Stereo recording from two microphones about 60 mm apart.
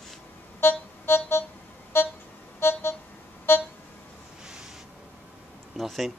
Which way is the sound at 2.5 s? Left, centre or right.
Left.